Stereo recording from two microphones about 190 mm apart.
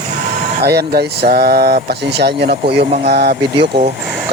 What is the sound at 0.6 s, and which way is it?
Speech, 55° right (ahead or behind).